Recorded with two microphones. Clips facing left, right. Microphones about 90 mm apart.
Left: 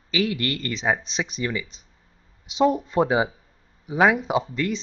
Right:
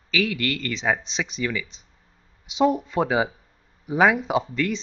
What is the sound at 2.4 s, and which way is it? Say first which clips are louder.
Speech: even; 20° right (ahead or behind).